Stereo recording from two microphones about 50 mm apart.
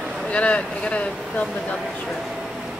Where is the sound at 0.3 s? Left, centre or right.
Left.